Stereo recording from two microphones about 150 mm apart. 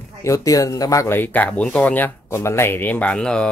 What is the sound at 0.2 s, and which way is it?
Speech, 20° left (ahead or behind).